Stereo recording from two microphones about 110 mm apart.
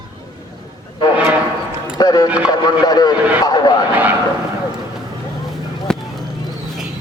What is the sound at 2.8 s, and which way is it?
Speech, 40° left (ahead or behind).